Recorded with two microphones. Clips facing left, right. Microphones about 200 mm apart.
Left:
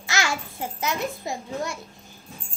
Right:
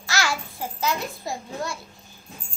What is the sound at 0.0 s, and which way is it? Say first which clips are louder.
A child's voice: even; 20° left (ahead or behind).